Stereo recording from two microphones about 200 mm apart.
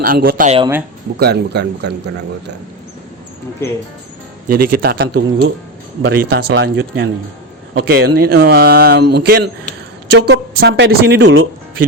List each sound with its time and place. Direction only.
0.0 s speech: 45° right (ahead or behind)
3.6 s speech: 10° left (ahead or behind)
4.4 s speech: 45° right (ahead or behind)